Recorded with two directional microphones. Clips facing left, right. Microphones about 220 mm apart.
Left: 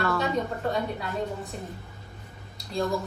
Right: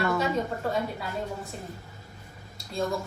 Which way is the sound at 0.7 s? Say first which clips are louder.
Left 1 dB; centre (ahead or behind).